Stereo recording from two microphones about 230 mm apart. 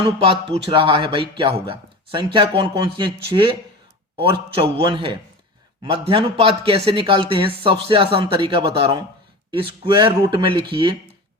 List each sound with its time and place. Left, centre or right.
0.2 s a man's voice: right